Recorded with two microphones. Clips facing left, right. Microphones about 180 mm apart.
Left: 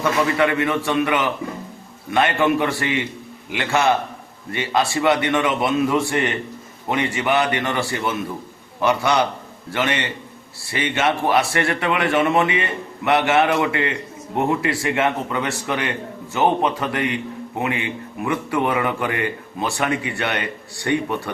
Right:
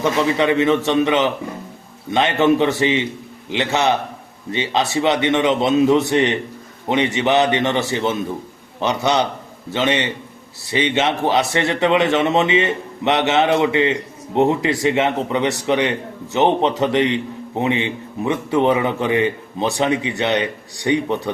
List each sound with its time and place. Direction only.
0.0 s a man's voice: 20° right (ahead or behind)